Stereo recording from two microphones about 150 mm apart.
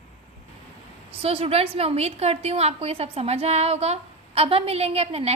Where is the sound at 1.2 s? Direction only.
40° right (ahead or behind).